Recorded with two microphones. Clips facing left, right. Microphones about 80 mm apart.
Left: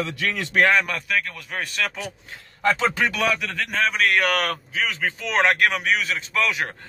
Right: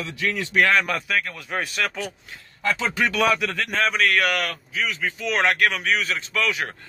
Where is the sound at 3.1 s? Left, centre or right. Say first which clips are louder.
Right 3 dB; centre.